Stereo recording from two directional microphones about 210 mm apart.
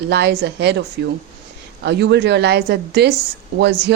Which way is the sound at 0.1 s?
55° right (ahead or behind).